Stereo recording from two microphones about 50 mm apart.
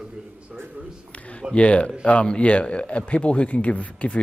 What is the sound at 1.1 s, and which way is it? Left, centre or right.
Speech, left.